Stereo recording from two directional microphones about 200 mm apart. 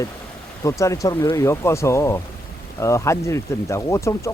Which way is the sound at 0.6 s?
15° left (ahead or behind).